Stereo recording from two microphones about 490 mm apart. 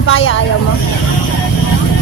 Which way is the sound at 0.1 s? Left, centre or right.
Left.